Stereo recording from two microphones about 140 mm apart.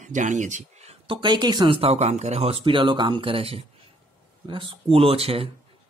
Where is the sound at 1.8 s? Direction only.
50° right (ahead or behind).